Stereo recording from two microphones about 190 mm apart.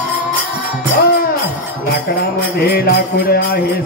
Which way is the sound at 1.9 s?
55° left (ahead or behind).